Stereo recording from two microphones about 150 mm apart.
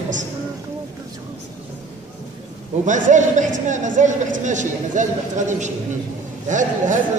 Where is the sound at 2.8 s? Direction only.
55° right (ahead or behind).